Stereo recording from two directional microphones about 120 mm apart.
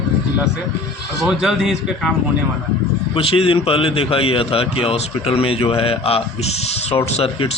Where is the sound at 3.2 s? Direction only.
50° left (ahead or behind).